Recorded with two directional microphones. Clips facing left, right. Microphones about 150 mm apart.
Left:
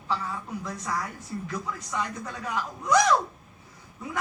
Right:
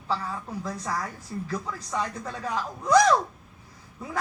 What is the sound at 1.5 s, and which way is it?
A woman's voice, 30° right (ahead or behind).